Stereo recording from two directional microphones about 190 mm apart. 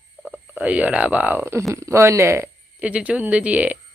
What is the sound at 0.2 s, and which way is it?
Speech, 10° right (ahead or behind).